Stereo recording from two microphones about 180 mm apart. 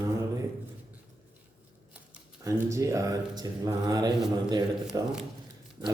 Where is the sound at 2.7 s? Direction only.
15° right (ahead or behind).